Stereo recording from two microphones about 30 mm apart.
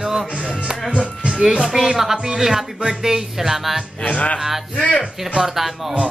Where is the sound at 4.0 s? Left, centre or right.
Left.